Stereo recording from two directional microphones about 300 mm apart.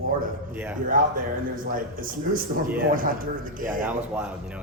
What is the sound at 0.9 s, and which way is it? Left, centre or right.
A man's voice, right.